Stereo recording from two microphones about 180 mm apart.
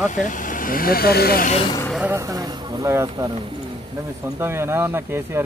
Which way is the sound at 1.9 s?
10° right (ahead or behind).